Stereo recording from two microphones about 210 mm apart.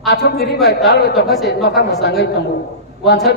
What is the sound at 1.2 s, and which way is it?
Speech, centre (ahead or behind).